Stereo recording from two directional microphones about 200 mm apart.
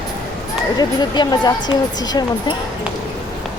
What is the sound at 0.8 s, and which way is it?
Speech, 20° left (ahead or behind).